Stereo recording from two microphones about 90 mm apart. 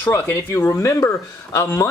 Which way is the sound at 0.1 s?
25° left (ahead or behind).